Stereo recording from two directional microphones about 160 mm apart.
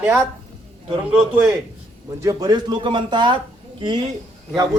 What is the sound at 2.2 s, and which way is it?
Speech, 25° right (ahead or behind).